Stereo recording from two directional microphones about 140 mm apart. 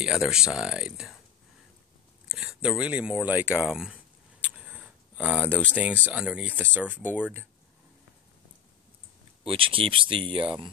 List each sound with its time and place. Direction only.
0.0 s speech: 5° right (ahead or behind)
2.2 s speech: 5° right (ahead or behind)
9.4 s speech: 40° right (ahead or behind)